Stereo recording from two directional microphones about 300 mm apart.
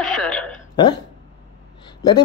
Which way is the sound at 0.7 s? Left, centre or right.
Centre.